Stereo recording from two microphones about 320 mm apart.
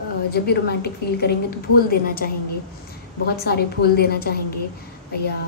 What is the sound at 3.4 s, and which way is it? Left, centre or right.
Speech, left.